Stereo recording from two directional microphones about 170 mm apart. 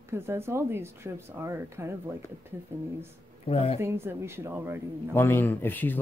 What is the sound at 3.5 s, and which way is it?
Speech, 35° left (ahead or behind).